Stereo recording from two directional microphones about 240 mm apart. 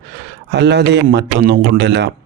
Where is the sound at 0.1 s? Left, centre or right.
Right.